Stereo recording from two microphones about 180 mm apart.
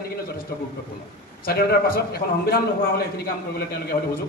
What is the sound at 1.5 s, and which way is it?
A man's voice, 55° left (ahead or behind).